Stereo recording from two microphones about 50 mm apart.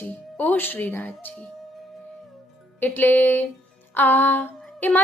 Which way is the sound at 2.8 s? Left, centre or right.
Left.